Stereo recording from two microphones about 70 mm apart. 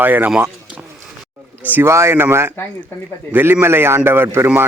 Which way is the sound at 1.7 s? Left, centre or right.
Right.